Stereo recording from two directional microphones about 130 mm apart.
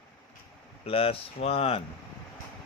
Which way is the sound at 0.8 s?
45° left (ahead or behind).